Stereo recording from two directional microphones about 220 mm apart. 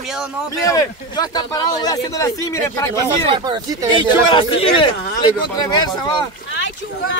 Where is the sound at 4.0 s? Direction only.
25° left (ahead or behind).